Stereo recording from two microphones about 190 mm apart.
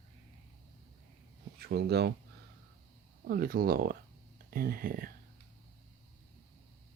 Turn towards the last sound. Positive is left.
turn(degrees=-50)  # may be behind; listen again after turning